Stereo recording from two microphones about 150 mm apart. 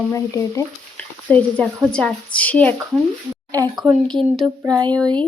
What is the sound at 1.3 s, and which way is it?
A woman's voice, 10° left (ahead or behind).